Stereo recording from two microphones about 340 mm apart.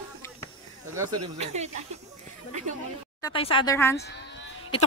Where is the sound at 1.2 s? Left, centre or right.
Centre.